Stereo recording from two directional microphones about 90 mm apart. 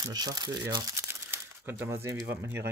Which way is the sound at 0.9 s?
25° right (ahead or behind).